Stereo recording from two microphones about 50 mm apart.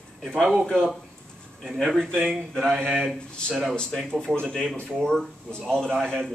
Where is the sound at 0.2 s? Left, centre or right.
Centre.